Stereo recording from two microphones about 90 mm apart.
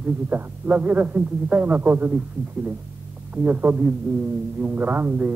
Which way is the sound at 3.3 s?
15° right (ahead or behind).